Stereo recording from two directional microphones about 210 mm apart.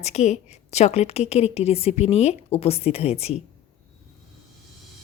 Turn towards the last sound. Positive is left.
turn(degrees=30)  # may be behind; listen again after turning